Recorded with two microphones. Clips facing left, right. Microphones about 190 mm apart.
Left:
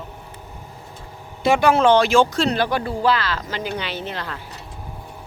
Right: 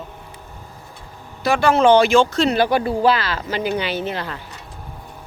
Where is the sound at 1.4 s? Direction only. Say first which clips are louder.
Left 1 dB; 20° left (ahead or behind).